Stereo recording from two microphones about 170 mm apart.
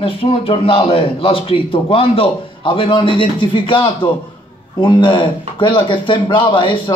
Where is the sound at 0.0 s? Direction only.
35° left (ahead or behind).